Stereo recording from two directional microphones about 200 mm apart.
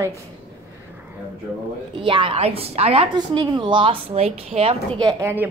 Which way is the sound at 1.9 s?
25° right (ahead or behind).